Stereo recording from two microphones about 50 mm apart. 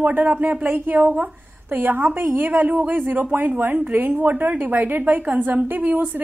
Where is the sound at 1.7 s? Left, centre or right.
Right.